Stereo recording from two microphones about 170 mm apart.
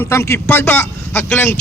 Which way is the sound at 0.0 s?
15° left (ahead or behind).